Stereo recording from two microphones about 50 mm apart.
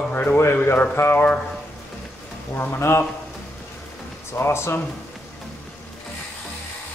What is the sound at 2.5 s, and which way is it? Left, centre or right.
Speech, left.